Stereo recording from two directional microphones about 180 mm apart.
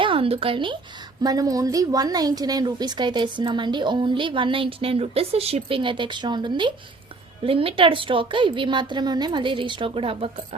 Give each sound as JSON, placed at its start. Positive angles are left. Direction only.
{"t": 0.0, "sound": "a woman's voice", "side_deg": -30}